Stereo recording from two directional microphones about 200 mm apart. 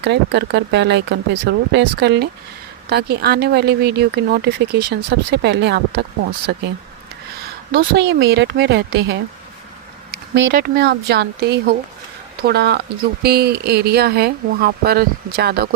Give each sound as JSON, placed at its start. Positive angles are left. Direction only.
{"t": 0.0, "sound": "speech", "side_deg": -60}
{"t": 7.7, "sound": "speech", "side_deg": -50}